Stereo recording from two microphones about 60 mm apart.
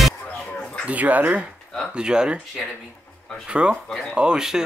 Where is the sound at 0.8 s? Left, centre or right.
Right.